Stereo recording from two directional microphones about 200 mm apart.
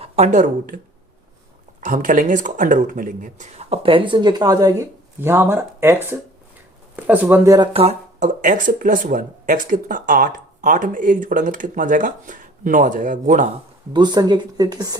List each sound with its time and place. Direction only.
0.0 s speech: 35° right (ahead or behind)
1.8 s speech: 40° right (ahead or behind)
13.9 s speech: 20° right (ahead or behind)